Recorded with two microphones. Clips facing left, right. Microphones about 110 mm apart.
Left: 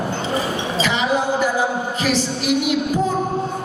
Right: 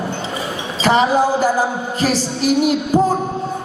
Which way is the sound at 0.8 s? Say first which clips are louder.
Right 7 dB; 40° right (ahead or behind).